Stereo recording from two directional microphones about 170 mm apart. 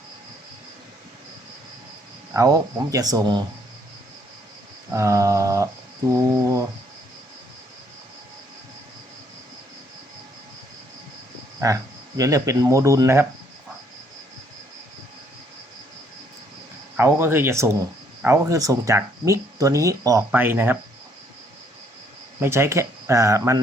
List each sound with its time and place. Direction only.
2.3 s speech: 20° right (ahead or behind)
4.9 s a sound: 20° right (ahead or behind)
6.1 s speech: 20° right (ahead or behind)
11.6 s speech: 20° right (ahead or behind)
17.0 s speech: 15° right (ahead or behind)
22.4 s speech: 15° right (ahead or behind)